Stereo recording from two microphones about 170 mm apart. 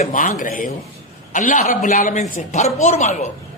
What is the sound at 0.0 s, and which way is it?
A man's voice, 50° left (ahead or behind).